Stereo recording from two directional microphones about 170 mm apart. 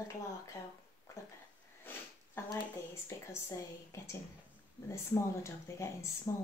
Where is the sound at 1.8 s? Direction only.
15° left (ahead or behind).